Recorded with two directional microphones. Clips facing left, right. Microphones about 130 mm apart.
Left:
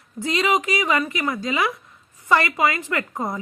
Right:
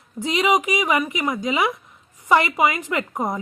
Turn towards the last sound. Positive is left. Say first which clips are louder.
# right 2 dB
turn(degrees=-20)  # may be behind; listen again after turning